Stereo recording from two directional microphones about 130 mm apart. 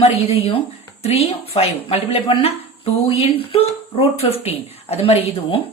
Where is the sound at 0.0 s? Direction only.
50° left (ahead or behind).